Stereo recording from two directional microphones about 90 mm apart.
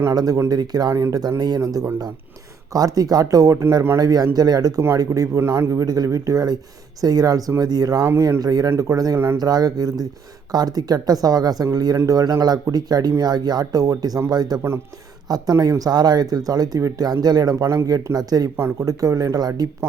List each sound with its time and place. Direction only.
0.1 s a man's voice: 45° right (ahead or behind)
5.4 s a man's voice: 30° right (ahead or behind)
5.8 s a man's voice: 45° right (ahead or behind)